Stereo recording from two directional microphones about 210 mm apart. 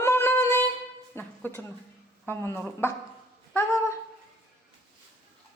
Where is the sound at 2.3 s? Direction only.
10° left (ahead or behind).